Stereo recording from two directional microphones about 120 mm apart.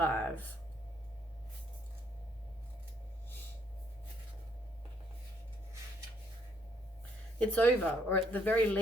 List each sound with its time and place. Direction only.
0.0 s speech: 15° left (ahead or behind)
7.3 s speech: 10° left (ahead or behind)